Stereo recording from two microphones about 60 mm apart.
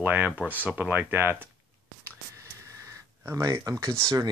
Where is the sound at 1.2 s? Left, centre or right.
Right.